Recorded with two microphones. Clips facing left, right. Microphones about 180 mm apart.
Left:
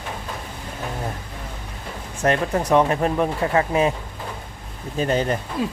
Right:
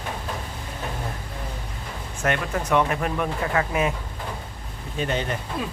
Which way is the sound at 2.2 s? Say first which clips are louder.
Left 5 dB; 35° left (ahead or behind).